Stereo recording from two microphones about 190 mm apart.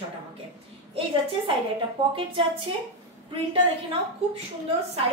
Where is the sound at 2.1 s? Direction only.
30° right (ahead or behind).